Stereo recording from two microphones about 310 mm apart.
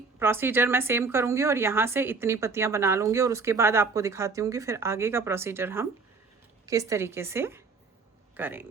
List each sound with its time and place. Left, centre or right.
0.2 s a woman's voice: centre